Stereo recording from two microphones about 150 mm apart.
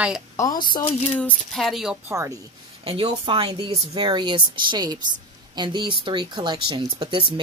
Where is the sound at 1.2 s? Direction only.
Centre (ahead or behind).